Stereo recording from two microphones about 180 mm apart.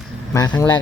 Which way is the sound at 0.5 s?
10° left (ahead or behind).